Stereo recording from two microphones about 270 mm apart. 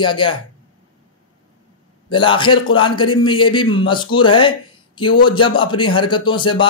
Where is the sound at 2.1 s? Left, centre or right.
Centre.